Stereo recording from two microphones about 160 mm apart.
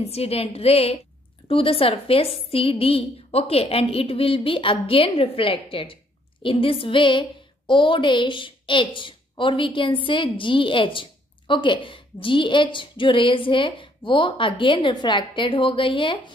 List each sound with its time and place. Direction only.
0.0 s a woman's voice: 40° left (ahead or behind)